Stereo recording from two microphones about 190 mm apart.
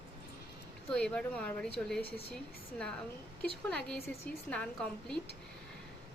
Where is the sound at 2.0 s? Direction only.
55° right (ahead or behind).